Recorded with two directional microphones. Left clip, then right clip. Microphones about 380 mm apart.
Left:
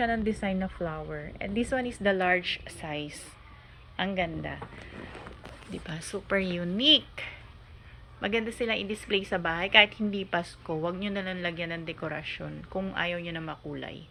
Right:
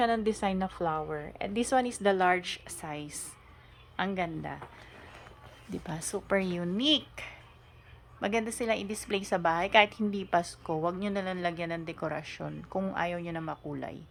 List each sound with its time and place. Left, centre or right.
0.0 s a woman's voice: centre
5.7 s a woman's voice: centre